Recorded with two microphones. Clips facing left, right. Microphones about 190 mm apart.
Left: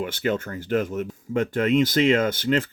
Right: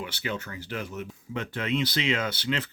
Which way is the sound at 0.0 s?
50° left (ahead or behind).